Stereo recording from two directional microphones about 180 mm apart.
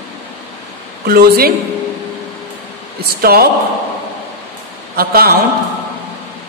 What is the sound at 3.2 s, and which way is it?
Speech, 55° right (ahead or behind).